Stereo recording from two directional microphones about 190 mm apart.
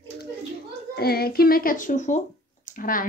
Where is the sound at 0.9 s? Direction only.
55° left (ahead or behind).